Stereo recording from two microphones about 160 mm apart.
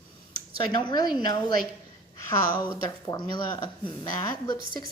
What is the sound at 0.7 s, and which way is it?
Speech, 25° left (ahead or behind).